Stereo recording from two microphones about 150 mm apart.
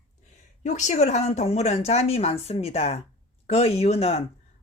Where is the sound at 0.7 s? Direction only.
50° left (ahead or behind).